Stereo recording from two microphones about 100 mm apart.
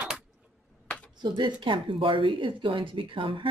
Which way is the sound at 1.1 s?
50° right (ahead or behind).